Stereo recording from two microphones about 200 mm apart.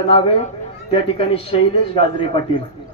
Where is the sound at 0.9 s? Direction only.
30° left (ahead or behind).